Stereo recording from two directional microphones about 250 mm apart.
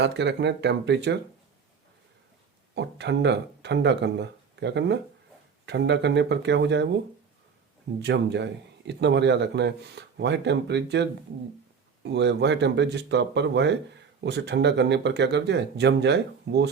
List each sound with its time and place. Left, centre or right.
0.0 s speech: right
2.7 s speech: right
8.0 s speech: right